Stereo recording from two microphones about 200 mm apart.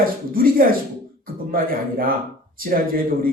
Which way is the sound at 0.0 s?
45° right (ahead or behind).